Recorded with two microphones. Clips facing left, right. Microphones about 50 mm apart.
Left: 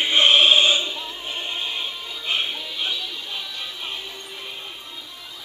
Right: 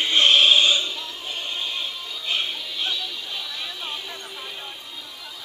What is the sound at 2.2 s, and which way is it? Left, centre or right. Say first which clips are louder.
Music: left 2 dB; centre.